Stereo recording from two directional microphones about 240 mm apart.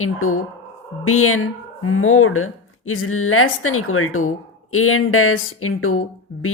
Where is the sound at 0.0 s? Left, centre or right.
Left.